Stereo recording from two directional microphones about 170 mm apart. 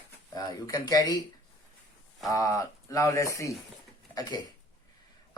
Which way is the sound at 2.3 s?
20° left (ahead or behind).